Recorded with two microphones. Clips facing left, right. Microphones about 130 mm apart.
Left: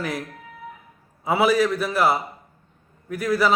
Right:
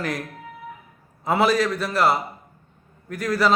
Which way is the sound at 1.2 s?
5° left (ahead or behind).